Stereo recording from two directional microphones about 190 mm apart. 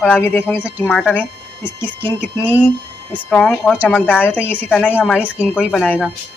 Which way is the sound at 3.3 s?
5° left (ahead or behind).